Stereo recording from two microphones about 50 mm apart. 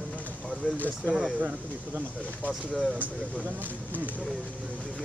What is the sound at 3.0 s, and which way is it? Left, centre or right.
Speech, right.